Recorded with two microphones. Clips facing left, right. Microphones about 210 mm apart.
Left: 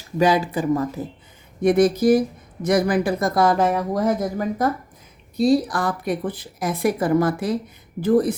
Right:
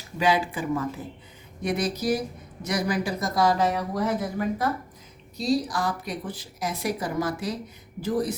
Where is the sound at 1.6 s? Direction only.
50° left (ahead or behind).